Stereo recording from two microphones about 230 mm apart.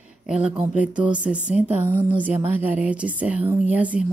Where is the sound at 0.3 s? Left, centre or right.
Centre.